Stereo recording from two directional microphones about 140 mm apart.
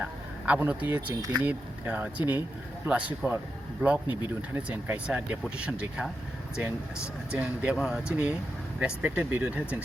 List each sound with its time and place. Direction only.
0.0 s speech: 10° right (ahead or behind)
1.0 s speech: 30° right (ahead or behind)
1.4 s speech: 10° right (ahead or behind)
4.0 s speech: 35° left (ahead or behind)
4.5 s speech: 10° right (ahead or behind)
7.3 s speech: 5° right (ahead or behind)